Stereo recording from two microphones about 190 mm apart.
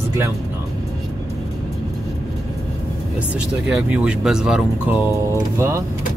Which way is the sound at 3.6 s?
5° right (ahead or behind).